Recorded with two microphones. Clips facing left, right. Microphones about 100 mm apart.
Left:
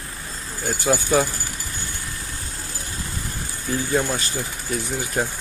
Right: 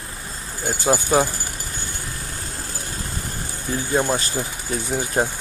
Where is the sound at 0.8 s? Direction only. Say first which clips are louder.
Right 1 dB; 25° right (ahead or behind).